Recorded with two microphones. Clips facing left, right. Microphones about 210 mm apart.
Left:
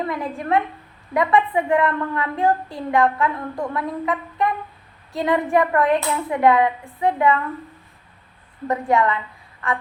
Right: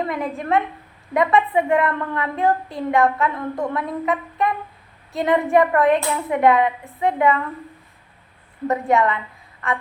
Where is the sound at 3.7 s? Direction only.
20° right (ahead or behind).